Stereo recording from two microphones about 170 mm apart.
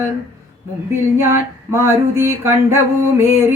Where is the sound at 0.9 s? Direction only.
15° right (ahead or behind).